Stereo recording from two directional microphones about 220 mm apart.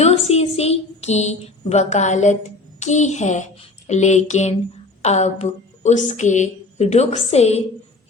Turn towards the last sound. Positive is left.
turn(degrees=30)  # may be behind; listen again after turning